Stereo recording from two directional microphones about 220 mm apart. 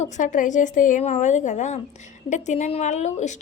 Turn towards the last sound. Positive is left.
turn(degrees=30)  # may be behind; listen again after turning